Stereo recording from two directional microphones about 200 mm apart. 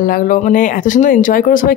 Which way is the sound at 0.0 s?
40° left (ahead or behind).